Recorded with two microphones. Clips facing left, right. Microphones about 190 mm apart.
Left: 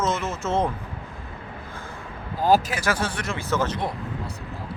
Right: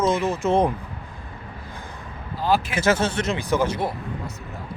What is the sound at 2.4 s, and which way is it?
Speech, 40° left (ahead or behind).